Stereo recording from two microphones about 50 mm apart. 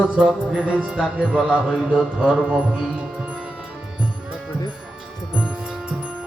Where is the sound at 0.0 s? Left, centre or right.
Centre.